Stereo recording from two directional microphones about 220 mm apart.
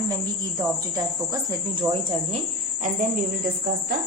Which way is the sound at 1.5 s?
20° right (ahead or behind).